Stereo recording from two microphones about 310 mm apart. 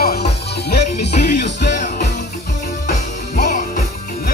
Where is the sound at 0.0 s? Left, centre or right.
Left.